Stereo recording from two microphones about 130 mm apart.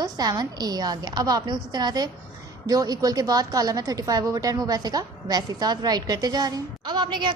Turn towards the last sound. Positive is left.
turn(degrees=-35)  # may be behind; listen again after turning